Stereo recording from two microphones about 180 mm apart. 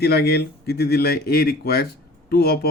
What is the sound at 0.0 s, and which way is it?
Speech, 65° left (ahead or behind).